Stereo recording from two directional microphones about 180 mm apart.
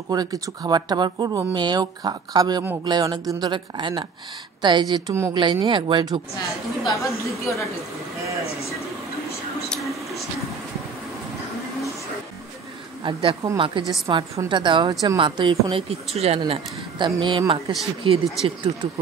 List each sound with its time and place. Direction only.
0.1 s a woman's voice: 20° right (ahead or behind)
6.9 s a woman's voice: 15° left (ahead or behind)
13.0 s a woman's voice: 30° right (ahead or behind)